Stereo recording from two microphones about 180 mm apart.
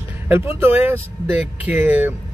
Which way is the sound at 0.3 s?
10° right (ahead or behind).